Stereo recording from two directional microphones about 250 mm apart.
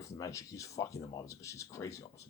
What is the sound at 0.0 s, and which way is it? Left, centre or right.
Speech, centre.